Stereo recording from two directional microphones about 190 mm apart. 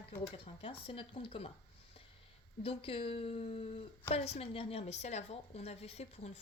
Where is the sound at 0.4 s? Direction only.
25° left (ahead or behind).